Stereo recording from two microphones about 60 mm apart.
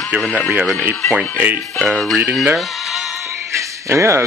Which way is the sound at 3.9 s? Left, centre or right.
Right.